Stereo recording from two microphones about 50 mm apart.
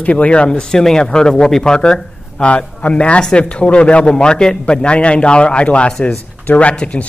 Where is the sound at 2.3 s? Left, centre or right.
Left.